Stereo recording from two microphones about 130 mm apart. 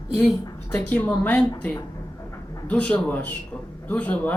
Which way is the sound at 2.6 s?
10° left (ahead or behind).